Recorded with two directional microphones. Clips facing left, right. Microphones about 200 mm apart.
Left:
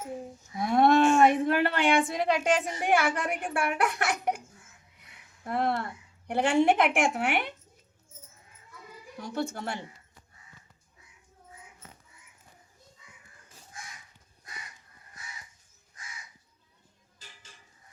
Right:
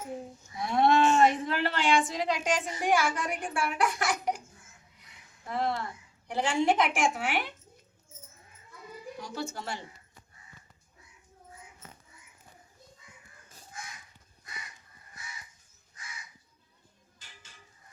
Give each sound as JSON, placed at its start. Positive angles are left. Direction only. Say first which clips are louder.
{"t": 0.6, "sound": "a sound", "louder": "left 3 dB", "side_deg": 55}
{"t": 4.9, "sound": "a woman's voice", "louder": "even", "side_deg": 60}
{"t": 9.2, "sound": "speech", "louder": "left 5 dB", "side_deg": 55}